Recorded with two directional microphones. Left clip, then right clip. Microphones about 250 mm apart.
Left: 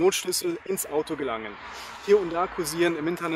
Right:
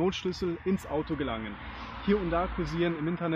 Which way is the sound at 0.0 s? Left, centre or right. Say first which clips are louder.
Left 6 dB; left.